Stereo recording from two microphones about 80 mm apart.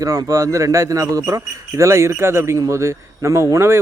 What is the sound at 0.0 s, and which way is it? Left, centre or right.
A man's voice, right.